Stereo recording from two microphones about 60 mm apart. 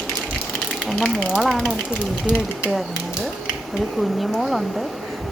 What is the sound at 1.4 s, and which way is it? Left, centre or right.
Speech, centre.